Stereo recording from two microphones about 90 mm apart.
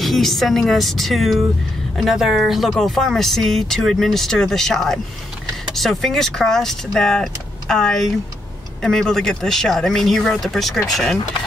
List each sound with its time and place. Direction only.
0.0 s speech: centre (ahead or behind)